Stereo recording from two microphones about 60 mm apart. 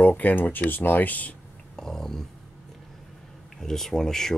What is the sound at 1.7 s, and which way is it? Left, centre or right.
Dog, centre.